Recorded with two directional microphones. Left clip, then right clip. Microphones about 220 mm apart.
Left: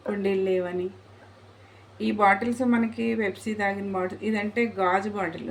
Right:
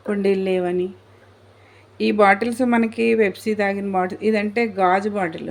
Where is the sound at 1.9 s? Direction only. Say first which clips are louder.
Right 6 dB; 40° right (ahead or behind).